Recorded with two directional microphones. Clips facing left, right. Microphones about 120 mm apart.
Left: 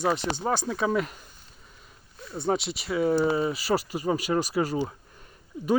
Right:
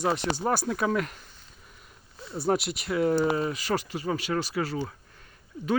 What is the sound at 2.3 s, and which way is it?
Speech, centre (ahead or behind).